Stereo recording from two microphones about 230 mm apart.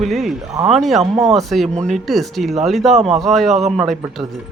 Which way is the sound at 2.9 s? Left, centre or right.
Right.